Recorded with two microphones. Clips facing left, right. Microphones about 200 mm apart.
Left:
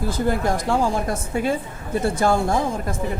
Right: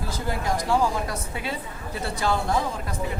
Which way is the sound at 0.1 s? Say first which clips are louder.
Left 5 dB; 55° left (ahead or behind).